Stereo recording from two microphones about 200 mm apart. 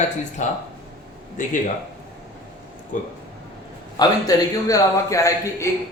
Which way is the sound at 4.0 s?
15° left (ahead or behind).